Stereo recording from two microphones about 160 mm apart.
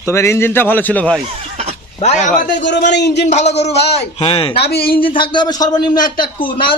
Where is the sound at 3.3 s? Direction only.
45° left (ahead or behind).